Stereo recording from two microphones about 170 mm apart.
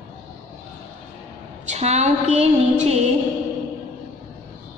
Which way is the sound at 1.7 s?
40° right (ahead or behind).